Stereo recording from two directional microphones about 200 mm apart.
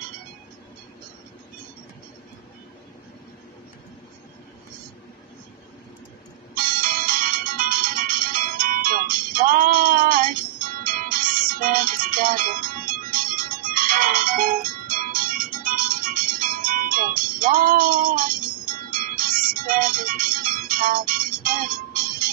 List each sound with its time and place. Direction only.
6.5 s music: 45° right (ahead or behind)